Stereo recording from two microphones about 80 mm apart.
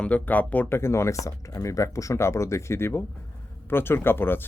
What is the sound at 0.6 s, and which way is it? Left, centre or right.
Speech, left.